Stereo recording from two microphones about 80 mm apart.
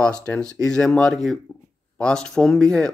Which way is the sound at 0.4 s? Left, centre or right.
Centre.